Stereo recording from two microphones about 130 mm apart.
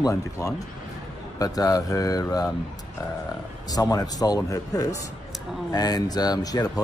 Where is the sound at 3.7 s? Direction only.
30° left (ahead or behind).